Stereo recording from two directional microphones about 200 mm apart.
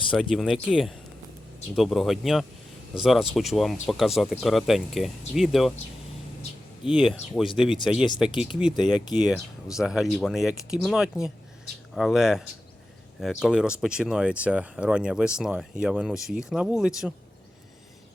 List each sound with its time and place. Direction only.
0.1 s speech: centre (ahead or behind)
6.8 s speech: 5° right (ahead or behind)